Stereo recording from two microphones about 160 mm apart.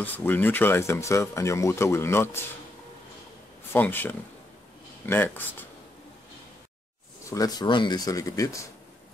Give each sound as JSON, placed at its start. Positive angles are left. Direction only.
{"t": 0.0, "sound": "speech", "side_deg": 10}
{"t": 3.7, "sound": "speech", "side_deg": 10}
{"t": 7.2, "sound": "speech", "side_deg": 20}